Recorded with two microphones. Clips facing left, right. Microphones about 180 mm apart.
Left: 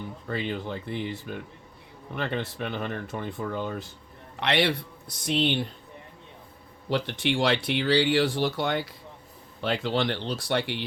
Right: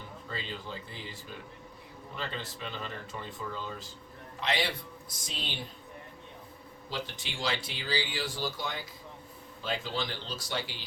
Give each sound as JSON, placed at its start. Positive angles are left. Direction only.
{"t": 0.3, "sound": "speech", "side_deg": 60}
{"t": 6.9, "sound": "speech", "side_deg": 65}